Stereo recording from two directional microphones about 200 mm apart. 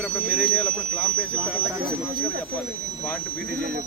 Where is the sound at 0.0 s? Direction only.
5° right (ahead or behind).